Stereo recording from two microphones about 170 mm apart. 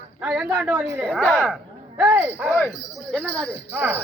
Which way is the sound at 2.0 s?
10° right (ahead or behind).